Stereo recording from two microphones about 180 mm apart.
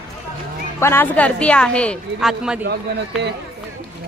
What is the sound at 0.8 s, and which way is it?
A woman's voice, 10° left (ahead or behind).